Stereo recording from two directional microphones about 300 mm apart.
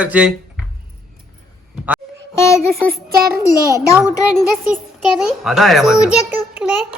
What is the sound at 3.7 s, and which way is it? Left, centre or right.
Speech, centre.